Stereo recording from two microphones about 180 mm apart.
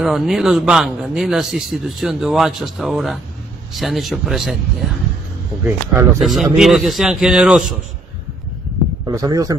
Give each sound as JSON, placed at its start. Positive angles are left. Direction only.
{"t": 0.0, "sound": "a man's voice", "side_deg": 0}
{"t": 5.6, "sound": "a man's voice", "side_deg": -10}
{"t": 9.0, "sound": "speech", "side_deg": -20}